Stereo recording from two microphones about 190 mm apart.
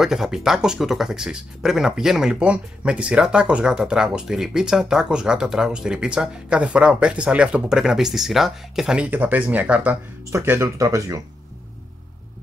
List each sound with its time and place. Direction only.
0.0 s speech: centre (ahead or behind)